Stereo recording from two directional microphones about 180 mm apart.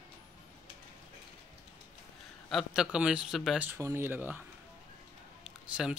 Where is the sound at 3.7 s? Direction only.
15° right (ahead or behind).